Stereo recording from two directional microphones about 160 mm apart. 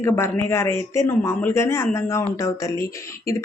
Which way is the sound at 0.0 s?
15° left (ahead or behind).